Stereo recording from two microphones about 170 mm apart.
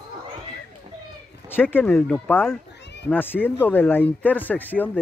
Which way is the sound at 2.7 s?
90° left.